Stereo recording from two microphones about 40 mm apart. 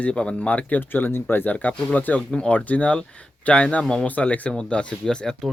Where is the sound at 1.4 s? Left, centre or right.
Left.